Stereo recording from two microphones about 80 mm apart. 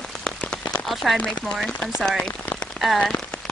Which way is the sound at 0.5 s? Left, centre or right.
Centre.